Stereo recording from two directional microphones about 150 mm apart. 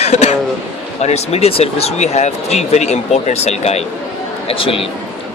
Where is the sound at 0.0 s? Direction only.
45° left (ahead or behind).